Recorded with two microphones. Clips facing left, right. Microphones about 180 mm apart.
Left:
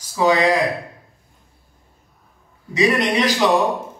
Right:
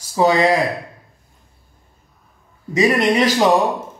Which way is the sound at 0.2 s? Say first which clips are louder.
Right 2 dB; 35° right (ahead or behind).